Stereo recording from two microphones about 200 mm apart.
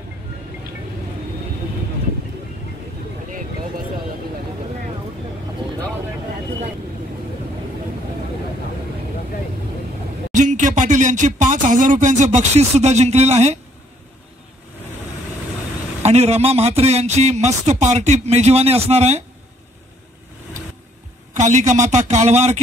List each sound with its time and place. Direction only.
10.3 s speech: 40° right (ahead or behind)
16.0 s speech: 30° right (ahead or behind)
21.3 s speech: 35° right (ahead or behind)